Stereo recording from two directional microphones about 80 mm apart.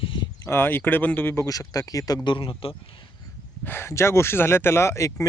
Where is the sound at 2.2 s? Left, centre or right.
Left.